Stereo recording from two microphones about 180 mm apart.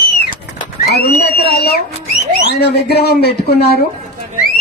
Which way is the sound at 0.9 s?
65° left (ahead or behind).